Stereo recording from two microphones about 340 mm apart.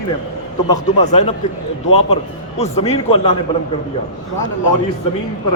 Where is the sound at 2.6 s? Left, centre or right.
Centre.